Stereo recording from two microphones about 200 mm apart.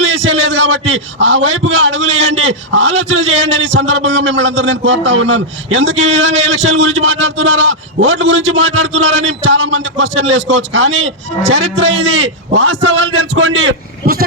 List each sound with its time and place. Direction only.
0.0 s a man's voice: 70° right (ahead or behind)